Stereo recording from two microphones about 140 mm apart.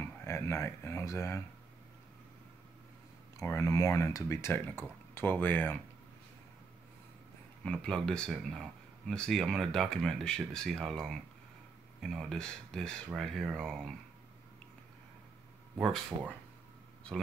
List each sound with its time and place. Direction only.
0.2 s speech: 20° left (ahead or behind)
3.3 s speech: 20° left (ahead or behind)
7.6 s speech: 5° left (ahead or behind)